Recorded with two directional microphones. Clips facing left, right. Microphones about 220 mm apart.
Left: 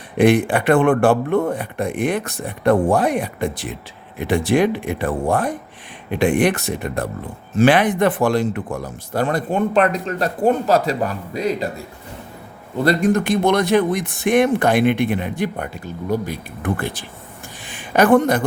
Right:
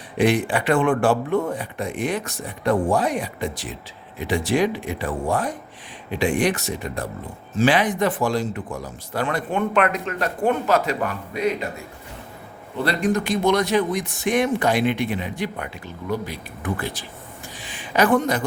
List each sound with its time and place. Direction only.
0.2 s speech: 55° left (ahead or behind)
9.2 s speech: 40° left (ahead or behind)
12.8 s speech: 45° left (ahead or behind)
17.6 s a sound: 50° left (ahead or behind)